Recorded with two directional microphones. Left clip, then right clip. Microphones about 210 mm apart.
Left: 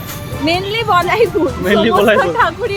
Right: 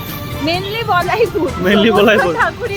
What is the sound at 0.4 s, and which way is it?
Speech, 30° left (ahead or behind).